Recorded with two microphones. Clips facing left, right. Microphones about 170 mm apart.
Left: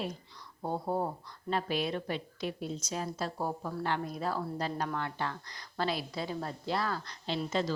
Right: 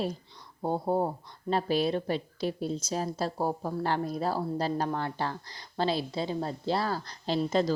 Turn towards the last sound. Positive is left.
turn(degrees=-40)  # may be behind; listen again after turning